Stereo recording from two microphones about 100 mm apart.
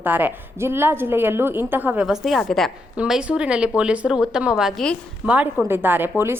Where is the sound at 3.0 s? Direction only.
10° right (ahead or behind).